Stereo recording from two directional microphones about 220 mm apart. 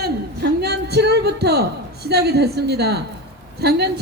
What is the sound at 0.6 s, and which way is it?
Music, 50° right (ahead or behind).